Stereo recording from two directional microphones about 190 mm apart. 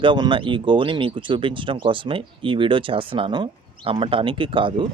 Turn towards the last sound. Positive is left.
turn(degrees=-25)  # may be behind; listen again after turning